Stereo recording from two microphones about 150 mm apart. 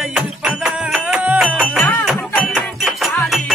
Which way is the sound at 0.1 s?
5° right (ahead or behind).